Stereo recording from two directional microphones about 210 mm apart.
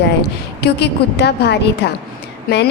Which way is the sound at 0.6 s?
55° left (ahead or behind).